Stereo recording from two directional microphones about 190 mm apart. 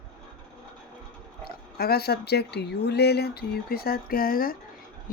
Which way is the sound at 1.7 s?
55° left (ahead or behind).